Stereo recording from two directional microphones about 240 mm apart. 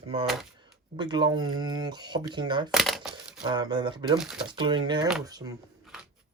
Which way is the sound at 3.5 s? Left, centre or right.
Centre.